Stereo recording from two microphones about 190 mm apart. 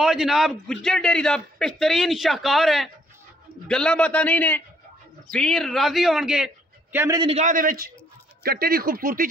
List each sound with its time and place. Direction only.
0.0 s a man's voice: centre (ahead or behind)
7.2 s speech: 35° right (ahead or behind); by 9.3 s 50° right (ahead or behind)